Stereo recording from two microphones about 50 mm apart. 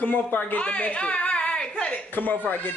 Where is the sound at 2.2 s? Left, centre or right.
Left.